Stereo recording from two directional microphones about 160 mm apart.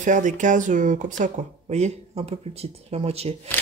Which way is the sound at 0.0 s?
55° right (ahead or behind).